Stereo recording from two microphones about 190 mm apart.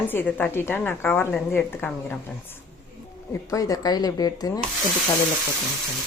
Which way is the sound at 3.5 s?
20° left (ahead or behind).